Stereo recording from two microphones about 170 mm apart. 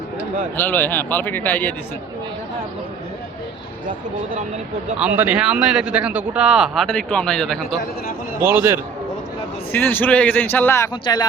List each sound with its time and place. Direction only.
0.5 s speech: 10° left (ahead or behind)
4.9 s speech: 10° right (ahead or behind)
8.4 s a man's voice: 10° right (ahead or behind)
9.7 s speech: 10° left (ahead or behind)
11.0 s speech: 25° left (ahead or behind)